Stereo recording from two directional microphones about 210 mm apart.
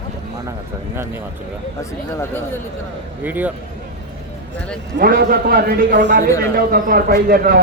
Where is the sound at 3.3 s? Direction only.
10° right (ahead or behind).